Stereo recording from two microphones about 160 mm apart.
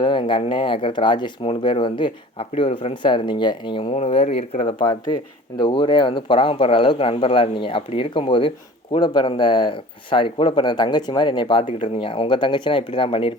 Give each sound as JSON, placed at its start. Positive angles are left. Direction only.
{"t": 0.0, "sound": "speech", "side_deg": 30}
{"t": 3.9, "sound": "speech", "side_deg": 40}